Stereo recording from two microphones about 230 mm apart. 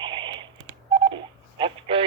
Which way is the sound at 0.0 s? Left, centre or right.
Right.